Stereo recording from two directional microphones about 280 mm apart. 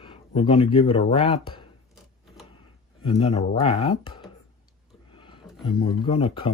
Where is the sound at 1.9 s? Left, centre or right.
Centre.